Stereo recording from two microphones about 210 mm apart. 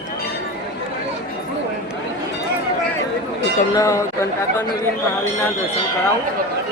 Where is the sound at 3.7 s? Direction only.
15° left (ahead or behind).